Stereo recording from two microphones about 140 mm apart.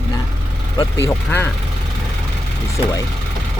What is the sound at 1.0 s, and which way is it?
Speech, 15° left (ahead or behind).